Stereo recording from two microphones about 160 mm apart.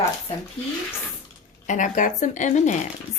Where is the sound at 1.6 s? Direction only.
50° left (ahead or behind).